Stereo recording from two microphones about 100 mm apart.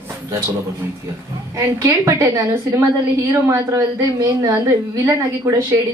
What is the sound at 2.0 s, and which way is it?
A woman's voice, 30° right (ahead or behind).